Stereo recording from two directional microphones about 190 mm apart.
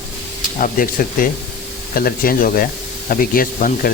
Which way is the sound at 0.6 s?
45° left (ahead or behind).